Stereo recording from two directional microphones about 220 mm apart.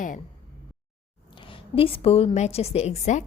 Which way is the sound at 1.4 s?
25° left (ahead or behind).